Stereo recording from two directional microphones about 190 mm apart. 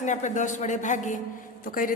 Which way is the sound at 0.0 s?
40° left (ahead or behind).